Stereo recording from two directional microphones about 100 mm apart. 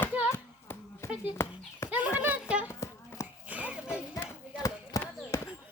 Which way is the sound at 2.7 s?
25° left (ahead or behind).